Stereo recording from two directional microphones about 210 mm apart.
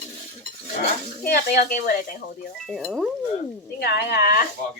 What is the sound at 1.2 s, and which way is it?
Speech, 50° left (ahead or behind).